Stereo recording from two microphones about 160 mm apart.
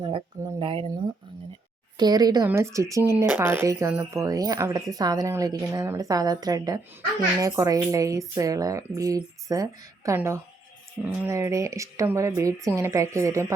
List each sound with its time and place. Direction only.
0.6 s speech: 35° right (ahead or behind)
2.0 s speech: 25° right (ahead or behind)